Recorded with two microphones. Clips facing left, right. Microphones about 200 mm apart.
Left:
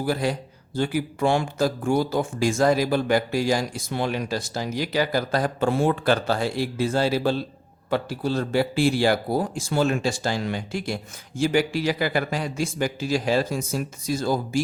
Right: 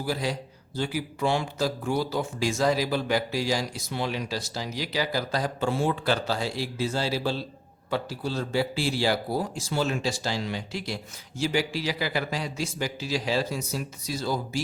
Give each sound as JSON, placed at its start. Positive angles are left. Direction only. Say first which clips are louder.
{"t": 0.0, "sound": "speech", "louder": "left 5 dB", "side_deg": 55}